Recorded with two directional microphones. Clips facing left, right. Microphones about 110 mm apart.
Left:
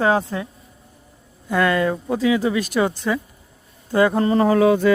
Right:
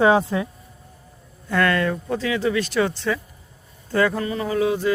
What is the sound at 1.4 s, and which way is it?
Speech, 15° left (ahead or behind).